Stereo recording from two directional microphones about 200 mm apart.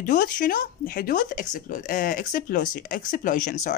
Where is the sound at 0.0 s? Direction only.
40° left (ahead or behind).